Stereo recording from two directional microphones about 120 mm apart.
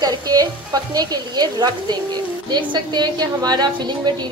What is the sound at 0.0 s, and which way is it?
A woman's voice, 35° right (ahead or behind).